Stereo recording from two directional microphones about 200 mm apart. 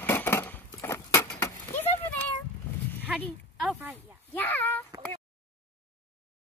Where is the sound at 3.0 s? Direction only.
Centre (ahead or behind).